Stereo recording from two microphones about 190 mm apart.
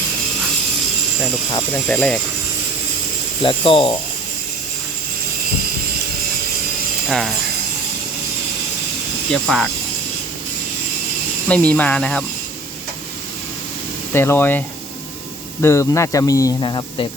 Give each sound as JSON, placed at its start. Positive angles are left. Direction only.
{"t": 1.7, "sound": "speech", "side_deg": 5}
{"t": 3.4, "sound": "speech", "side_deg": 25}
{"t": 7.1, "sound": "speech", "side_deg": 0}
{"t": 9.3, "sound": "speech", "side_deg": 5}
{"t": 11.4, "sound": "speech", "side_deg": 5}
{"t": 14.1, "sound": "speech", "side_deg": 10}
{"t": 15.6, "sound": "speech", "side_deg": 15}